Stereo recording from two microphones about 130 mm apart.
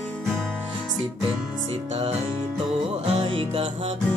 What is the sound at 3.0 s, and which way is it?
Music, 40° right (ahead or behind).